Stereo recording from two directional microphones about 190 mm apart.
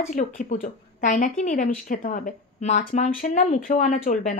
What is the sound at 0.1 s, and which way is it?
A woman's voice, 45° left (ahead or behind).